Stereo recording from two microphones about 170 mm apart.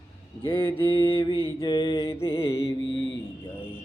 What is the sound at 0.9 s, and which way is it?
Mantra, 30° left (ahead or behind).